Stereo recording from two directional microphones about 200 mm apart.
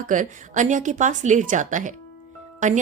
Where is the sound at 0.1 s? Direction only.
40° right (ahead or behind).